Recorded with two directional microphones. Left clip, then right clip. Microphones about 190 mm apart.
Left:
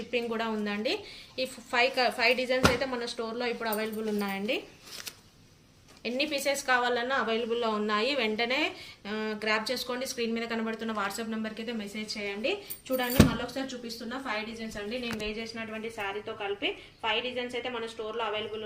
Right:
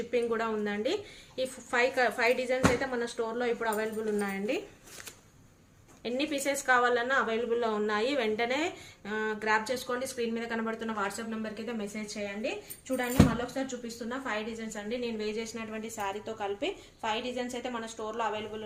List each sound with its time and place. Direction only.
0.1 s a woman's voice: 25° right (ahead or behind)
6.0 s a woman's voice: 30° right (ahead or behind)
13.5 s a woman's voice: 40° right (ahead or behind)
14.8 s a woman's voice: 60° right (ahead or behind)